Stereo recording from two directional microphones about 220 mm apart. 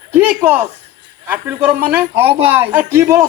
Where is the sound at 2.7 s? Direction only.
10° right (ahead or behind).